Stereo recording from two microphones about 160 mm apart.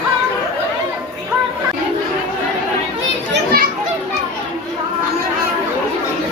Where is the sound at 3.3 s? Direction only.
70° right (ahead or behind).